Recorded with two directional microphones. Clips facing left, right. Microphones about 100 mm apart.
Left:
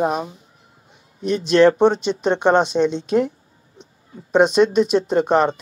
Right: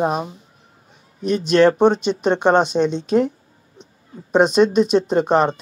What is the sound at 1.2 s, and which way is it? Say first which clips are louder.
Speech: right 1 dB; 40° right (ahead or behind).